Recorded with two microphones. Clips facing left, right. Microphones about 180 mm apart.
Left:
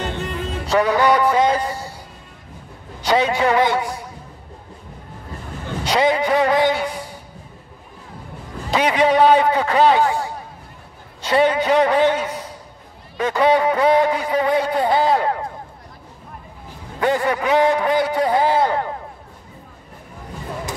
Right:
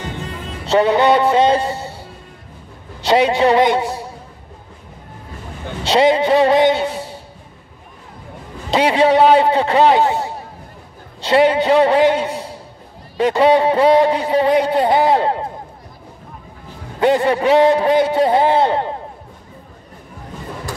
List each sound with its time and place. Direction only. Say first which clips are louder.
0.7 s a man's voice: right 3 dB; 25° right (ahead or behind)
3.0 s speech: right 4 dB; 25° right (ahead or behind)
5.9 s a man's voice: right 4 dB; 25° right (ahead or behind)
8.6 s a man's voice: right 3 dB; 25° right (ahead or behind)
17.0 s speech: right 5 dB; 25° right (ahead or behind)